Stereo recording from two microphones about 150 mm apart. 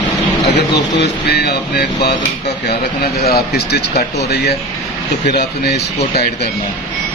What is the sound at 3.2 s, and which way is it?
Speech, 90° left.